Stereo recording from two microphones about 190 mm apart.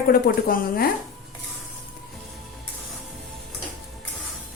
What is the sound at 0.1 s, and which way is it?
Speech, 50° left (ahead or behind).